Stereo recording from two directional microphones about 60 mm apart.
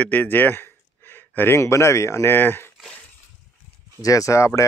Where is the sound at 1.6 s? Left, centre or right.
Left.